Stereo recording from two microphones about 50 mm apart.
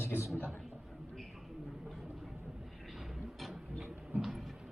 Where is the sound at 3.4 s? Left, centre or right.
Centre.